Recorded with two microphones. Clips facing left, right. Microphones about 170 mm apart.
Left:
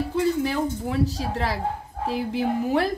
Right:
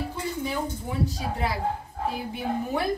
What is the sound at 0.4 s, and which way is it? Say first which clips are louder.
A woman's voice: left 5 dB; 85° left.